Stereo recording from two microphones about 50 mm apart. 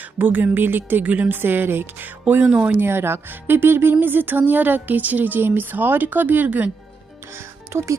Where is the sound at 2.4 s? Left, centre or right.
Right.